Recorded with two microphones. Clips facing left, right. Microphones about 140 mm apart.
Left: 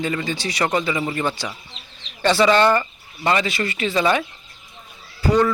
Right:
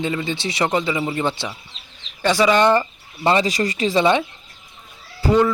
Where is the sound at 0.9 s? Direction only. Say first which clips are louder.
Right 1 dB; 5° right (ahead or behind).